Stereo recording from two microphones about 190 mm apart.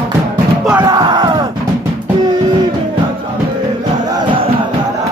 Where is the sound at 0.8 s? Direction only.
25° right (ahead or behind).